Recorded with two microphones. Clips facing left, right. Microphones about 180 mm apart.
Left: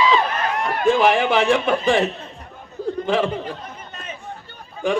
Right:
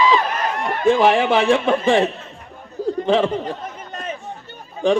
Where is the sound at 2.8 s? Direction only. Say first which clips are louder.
Right 3 dB; 40° right (ahead or behind).